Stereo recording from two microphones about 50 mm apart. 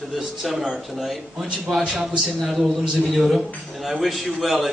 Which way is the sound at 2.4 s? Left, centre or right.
Centre.